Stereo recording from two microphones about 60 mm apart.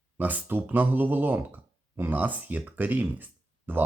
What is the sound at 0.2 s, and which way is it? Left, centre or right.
Speech, right.